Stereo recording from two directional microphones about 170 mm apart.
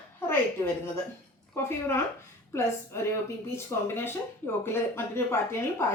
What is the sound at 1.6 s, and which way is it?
Speech, 15° left (ahead or behind).